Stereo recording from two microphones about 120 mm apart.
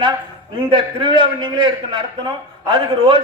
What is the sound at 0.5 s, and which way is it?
A man's voice, 45° right (ahead or behind).